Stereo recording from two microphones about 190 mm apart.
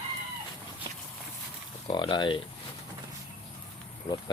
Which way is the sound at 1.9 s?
25° left (ahead or behind).